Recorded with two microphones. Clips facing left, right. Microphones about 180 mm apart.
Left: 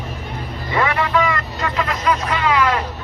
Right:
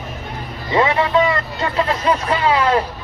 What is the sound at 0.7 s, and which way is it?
Vehicle, 25° right (ahead or behind).